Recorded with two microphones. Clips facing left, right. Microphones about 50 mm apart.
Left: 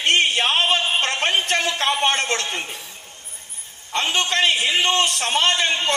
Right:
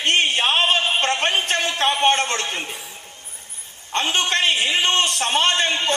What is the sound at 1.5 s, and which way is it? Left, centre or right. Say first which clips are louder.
Speech: even; right.